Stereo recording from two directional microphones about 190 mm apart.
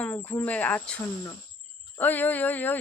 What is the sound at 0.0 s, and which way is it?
Speech, 10° left (ahead or behind).